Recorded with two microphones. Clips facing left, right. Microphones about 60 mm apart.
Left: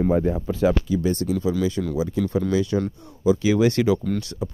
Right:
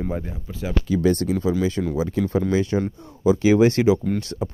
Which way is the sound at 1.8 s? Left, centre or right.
Right.